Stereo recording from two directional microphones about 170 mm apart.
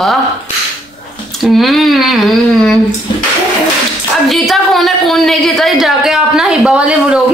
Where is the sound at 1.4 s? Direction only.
Centre (ahead or behind).